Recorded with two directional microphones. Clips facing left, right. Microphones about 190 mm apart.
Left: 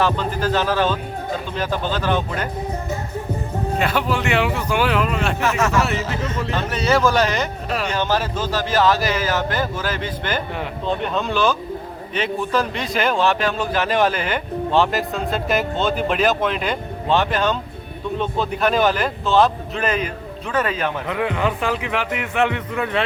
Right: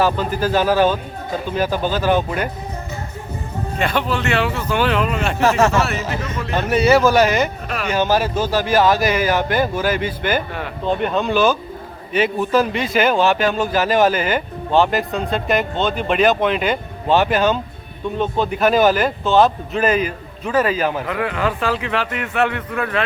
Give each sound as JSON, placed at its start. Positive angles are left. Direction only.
{"t": 0.0, "sound": "speech", "side_deg": -10}
{"t": 3.8, "sound": "speech", "side_deg": 5}
{"t": 5.4, "sound": "speech", "side_deg": -35}
{"t": 6.7, "sound": "a man's voice", "side_deg": -10}
{"t": 21.1, "sound": "speech", "side_deg": 20}